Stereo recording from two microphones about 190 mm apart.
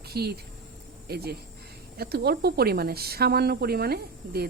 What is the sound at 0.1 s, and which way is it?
Speech, 55° right (ahead or behind).